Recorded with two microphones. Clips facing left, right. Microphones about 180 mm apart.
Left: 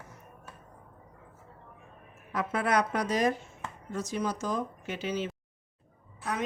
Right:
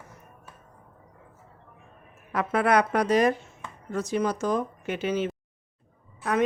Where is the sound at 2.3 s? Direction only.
65° right (ahead or behind).